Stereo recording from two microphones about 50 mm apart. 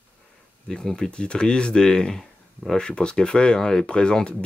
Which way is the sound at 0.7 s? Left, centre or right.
Centre.